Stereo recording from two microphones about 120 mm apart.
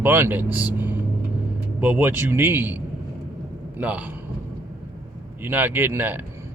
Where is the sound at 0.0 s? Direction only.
15° right (ahead or behind).